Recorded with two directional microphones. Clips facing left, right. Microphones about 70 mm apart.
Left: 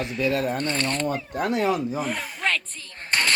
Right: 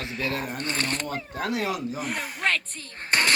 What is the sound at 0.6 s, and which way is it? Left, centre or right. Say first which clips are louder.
Speech: left 3 dB; centre.